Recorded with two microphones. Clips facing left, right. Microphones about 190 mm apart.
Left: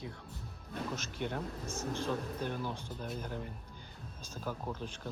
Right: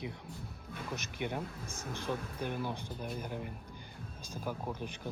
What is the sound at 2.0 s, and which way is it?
Speech, 15° right (ahead or behind).